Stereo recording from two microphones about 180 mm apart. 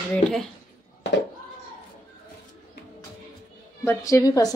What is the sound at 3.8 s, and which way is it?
Speech, 15° left (ahead or behind).